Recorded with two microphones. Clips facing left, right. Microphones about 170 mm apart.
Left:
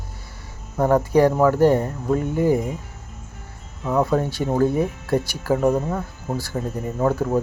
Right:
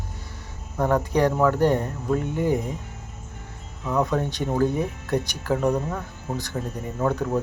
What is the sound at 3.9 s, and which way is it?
Speech, 10° left (ahead or behind).